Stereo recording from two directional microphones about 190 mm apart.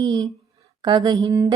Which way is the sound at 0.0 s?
25° right (ahead or behind).